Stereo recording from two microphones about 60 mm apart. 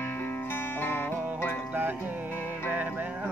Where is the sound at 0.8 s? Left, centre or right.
Left.